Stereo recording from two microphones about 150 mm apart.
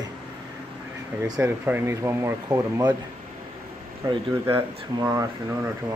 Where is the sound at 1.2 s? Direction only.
15° right (ahead or behind).